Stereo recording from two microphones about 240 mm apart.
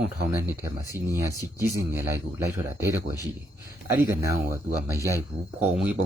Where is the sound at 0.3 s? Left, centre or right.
Centre.